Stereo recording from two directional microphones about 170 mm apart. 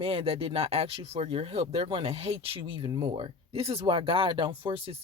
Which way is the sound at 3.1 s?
35° right (ahead or behind).